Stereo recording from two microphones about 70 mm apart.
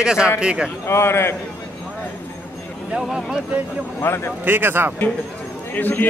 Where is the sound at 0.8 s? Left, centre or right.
Left.